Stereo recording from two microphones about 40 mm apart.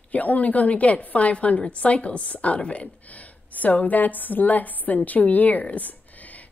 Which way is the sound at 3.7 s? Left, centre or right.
Left.